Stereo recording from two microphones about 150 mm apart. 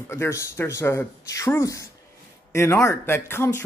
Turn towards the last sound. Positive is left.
turn(degrees=15)  # may be behind; listen again after turning